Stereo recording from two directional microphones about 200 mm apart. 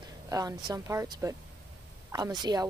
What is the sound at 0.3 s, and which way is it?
Speech, 15° right (ahead or behind).